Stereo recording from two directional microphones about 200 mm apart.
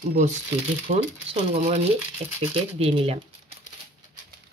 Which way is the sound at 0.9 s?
30° right (ahead or behind).